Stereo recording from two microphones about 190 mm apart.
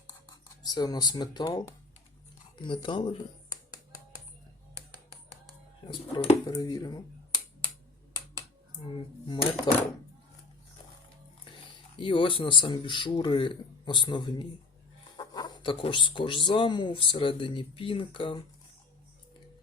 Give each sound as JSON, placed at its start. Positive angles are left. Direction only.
{"t": 0.3, "sound": "speech", "side_deg": 20}
{"t": 2.8, "sound": "speech", "side_deg": 25}
{"t": 5.9, "sound": "speech", "side_deg": 25}
{"t": 8.1, "sound": "a sound", "side_deg": 25}
{"t": 11.9, "sound": "speech", "side_deg": 25}